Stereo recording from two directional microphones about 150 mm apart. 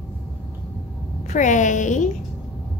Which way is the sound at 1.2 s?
55° left (ahead or behind).